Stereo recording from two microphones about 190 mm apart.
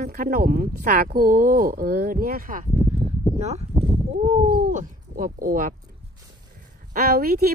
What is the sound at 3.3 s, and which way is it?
Speech, 35° right (ahead or behind).